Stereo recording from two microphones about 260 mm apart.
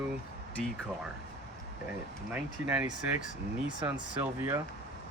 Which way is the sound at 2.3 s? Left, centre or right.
Centre.